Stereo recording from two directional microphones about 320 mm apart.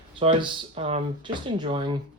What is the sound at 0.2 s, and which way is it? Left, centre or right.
Speech, centre.